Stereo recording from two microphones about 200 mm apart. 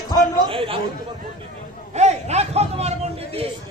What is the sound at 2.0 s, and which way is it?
Speech, 35° right (ahead or behind).